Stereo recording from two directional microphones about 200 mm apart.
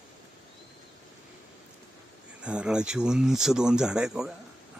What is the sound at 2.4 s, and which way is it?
Speech, 5° right (ahead or behind).